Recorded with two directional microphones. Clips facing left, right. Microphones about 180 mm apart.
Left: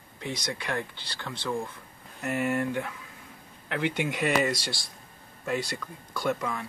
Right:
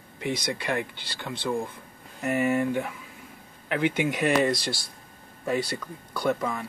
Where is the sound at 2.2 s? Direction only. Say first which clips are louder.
Right 4 dB; centre (ahead or behind).